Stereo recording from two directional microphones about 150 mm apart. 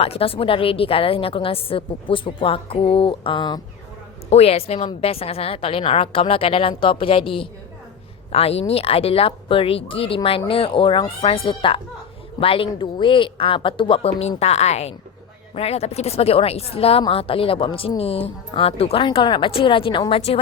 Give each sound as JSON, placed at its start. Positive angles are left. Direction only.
{"t": 0.0, "sound": "a woman's voice", "side_deg": 40}
{"t": 4.3, "sound": "a woman's voice", "side_deg": 45}